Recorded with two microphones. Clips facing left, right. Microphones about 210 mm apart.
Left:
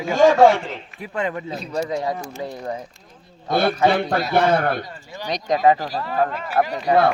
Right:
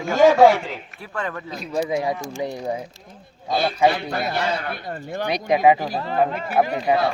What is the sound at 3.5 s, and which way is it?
A man's voice, 55° left (ahead or behind).